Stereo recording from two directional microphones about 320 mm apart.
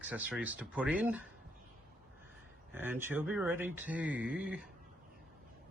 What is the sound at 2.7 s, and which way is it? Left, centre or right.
Speech, centre.